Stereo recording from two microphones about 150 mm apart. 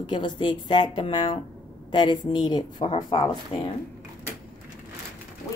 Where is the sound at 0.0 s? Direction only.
35° left (ahead or behind).